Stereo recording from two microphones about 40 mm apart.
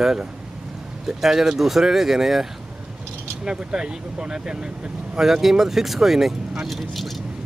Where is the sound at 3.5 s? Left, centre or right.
Centre.